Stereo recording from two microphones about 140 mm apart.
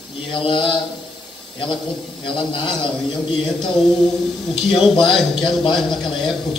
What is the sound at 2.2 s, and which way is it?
Speech, 35° left (ahead or behind).